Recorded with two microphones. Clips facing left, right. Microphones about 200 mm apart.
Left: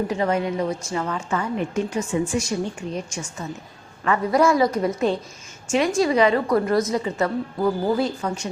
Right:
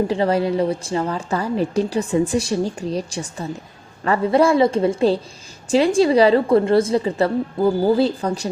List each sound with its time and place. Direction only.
0.1 s a woman's voice: 30° right (ahead or behind)